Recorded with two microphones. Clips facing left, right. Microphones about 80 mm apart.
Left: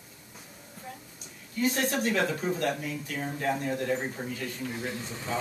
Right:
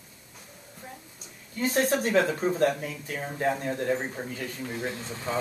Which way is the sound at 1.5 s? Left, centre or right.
Right.